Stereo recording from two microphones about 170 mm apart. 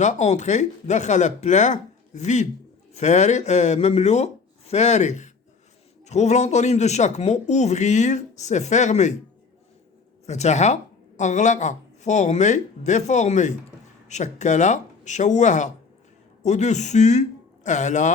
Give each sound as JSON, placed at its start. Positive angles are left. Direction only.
{"t": 0.0, "sound": "speech", "side_deg": 45}
{"t": 10.2, "sound": "speech", "side_deg": 40}